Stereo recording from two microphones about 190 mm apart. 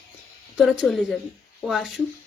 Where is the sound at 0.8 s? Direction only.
Centre (ahead or behind).